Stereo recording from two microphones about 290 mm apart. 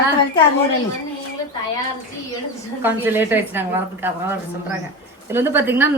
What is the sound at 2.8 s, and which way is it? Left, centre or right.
A woman's voice, centre.